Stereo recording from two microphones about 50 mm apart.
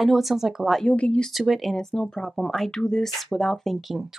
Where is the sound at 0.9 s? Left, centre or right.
Left.